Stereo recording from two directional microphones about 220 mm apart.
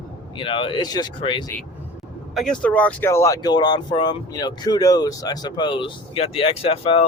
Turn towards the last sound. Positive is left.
turn(degrees=25)  # may be behind; listen again after turning